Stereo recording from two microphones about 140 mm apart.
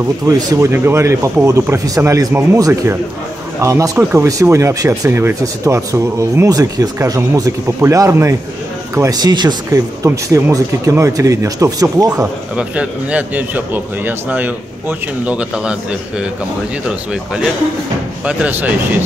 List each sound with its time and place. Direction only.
0.3 s speech: 25° right (ahead or behind)
12.1 s a man's voice: 10° right (ahead or behind)
18.2 s a man's voice: 10° right (ahead or behind)